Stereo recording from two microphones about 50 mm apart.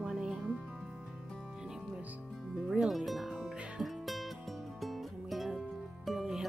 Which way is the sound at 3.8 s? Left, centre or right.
Centre.